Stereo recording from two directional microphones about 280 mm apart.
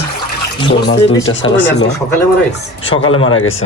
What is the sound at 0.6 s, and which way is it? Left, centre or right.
Speech, centre.